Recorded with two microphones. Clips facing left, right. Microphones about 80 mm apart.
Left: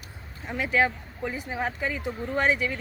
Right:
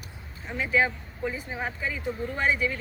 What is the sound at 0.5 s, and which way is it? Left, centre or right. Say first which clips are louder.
Speech: left 1 dB; left.